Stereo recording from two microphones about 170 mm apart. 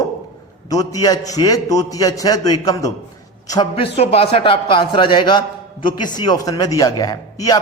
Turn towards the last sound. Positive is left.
turn(degrees=20)  # may be behind; listen again after turning